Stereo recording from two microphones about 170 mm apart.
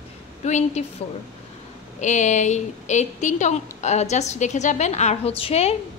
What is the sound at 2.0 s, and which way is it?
A woman's voice, 45° left (ahead or behind).